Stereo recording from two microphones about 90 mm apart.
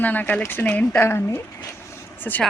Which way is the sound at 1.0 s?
30° left (ahead or behind).